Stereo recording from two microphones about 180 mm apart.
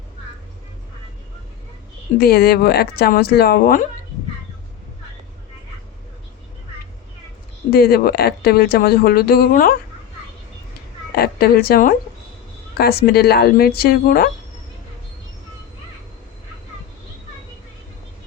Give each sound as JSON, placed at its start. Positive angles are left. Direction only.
{"t": 2.1, "sound": "a woman's voice", "side_deg": 60}
{"t": 7.7, "sound": "a woman's voice", "side_deg": 60}
{"t": 11.1, "sound": "a woman's voice", "side_deg": 60}